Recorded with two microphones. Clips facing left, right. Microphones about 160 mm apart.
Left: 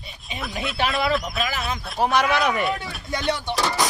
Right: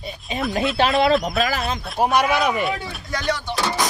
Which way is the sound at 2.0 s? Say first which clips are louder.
Right 2 dB; 5° right (ahead or behind).